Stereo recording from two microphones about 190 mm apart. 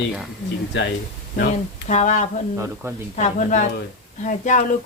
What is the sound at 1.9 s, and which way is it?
Speech, 40° left (ahead or behind).